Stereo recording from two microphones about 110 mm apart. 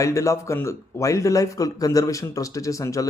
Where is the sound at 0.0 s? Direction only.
30° left (ahead or behind).